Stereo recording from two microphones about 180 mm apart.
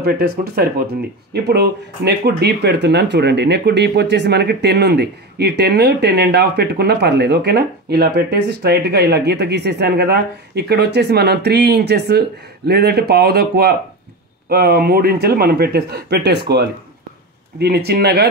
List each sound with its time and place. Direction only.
0.0 s speech: 60° right (ahead or behind)